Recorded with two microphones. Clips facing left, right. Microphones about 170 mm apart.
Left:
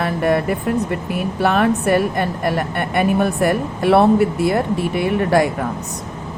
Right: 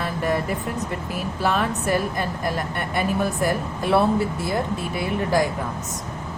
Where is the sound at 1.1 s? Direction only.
65° left (ahead or behind).